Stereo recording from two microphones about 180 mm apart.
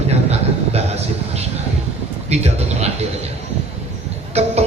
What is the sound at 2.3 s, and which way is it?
Speech, 35° right (ahead or behind).